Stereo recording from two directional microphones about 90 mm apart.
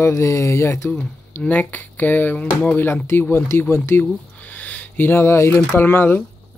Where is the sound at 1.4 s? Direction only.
20° left (ahead or behind).